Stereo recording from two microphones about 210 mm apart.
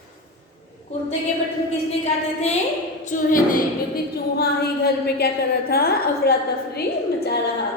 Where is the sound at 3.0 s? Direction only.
40° left (ahead or behind).